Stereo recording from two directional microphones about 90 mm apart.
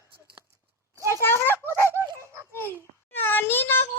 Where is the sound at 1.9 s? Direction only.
30° right (ahead or behind).